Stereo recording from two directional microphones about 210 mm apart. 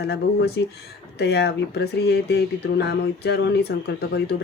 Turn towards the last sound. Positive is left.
turn(degrees=50)  # may be behind; listen again after turning